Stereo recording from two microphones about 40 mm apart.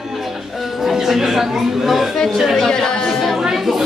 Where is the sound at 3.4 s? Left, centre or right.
Centre.